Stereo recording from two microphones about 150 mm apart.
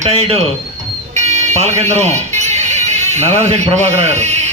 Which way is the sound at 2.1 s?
50° right (ahead or behind).